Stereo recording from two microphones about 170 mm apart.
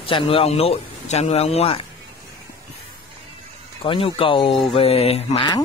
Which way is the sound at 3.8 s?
30° left (ahead or behind).